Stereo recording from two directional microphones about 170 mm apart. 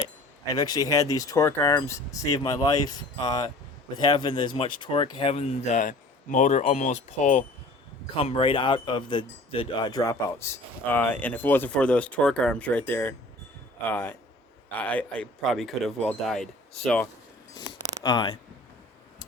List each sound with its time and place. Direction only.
0.5 s speech: 25° left (ahead or behind); by 7.4 s 45° left (ahead or behind)
8.1 s speech: 35° left (ahead or behind); by 17.1 s 5° left (ahead or behind)
17.7 s a sound: 25° left (ahead or behind)